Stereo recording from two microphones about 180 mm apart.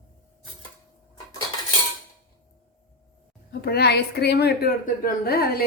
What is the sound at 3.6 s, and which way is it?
A woman's voice, 60° left (ahead or behind).